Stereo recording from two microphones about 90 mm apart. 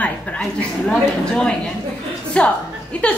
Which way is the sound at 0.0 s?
15° left (ahead or behind).